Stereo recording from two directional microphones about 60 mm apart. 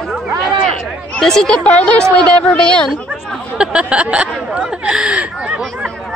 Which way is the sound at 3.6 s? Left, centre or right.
Centre.